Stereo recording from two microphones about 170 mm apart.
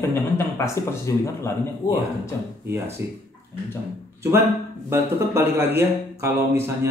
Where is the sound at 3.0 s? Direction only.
15° right (ahead or behind).